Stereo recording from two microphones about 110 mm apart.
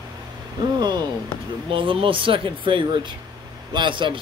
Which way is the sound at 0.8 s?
40° right (ahead or behind).